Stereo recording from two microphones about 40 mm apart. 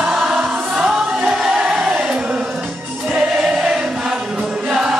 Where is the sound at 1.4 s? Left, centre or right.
Right.